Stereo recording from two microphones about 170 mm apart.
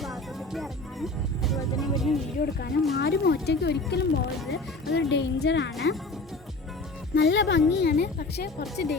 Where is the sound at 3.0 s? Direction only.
70° left (ahead or behind); by 6.0 s 90° left.